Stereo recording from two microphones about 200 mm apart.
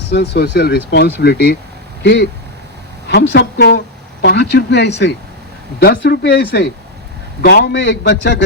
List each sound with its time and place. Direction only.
0.1 s a man's voice: 55° left (ahead or behind)
3.1 s a woman's voice: 55° left (ahead or behind)